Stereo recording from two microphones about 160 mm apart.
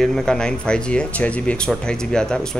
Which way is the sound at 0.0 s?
5° left (ahead or behind).